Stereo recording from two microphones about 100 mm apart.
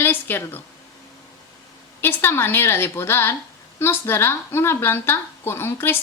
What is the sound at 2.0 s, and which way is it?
A woman's voice, 20° left (ahead or behind).